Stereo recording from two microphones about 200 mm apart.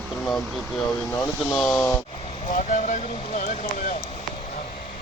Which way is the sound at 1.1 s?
5° left (ahead or behind).